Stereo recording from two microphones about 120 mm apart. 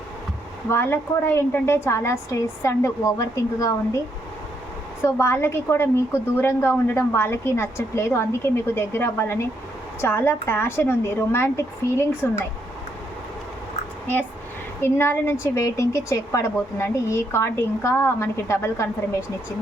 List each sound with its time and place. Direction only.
0.7 s a woman's voice: 20° left (ahead or behind)
5.0 s a woman's voice: 25° left (ahead or behind)
14.8 s a woman's voice: 20° left (ahead or behind)